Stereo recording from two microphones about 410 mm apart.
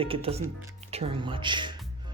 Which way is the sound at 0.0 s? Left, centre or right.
Centre.